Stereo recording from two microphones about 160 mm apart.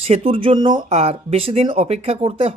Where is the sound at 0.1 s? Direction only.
35° right (ahead or behind).